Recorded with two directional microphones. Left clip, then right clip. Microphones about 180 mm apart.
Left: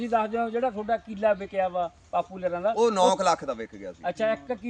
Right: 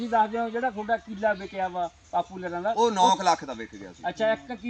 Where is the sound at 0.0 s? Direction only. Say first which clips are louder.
Right 1 dB; 25° left (ahead or behind).